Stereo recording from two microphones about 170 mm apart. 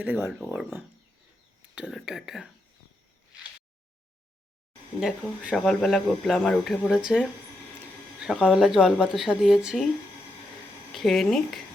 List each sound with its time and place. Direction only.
0.0 s speech: 10° right (ahead or behind)
1.7 s speech: 5° right (ahead or behind)
4.9 s speech: 5° right (ahead or behind)
10.9 s speech: centre (ahead or behind)